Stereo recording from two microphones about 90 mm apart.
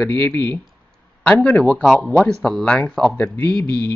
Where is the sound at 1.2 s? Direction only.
10° left (ahead or behind).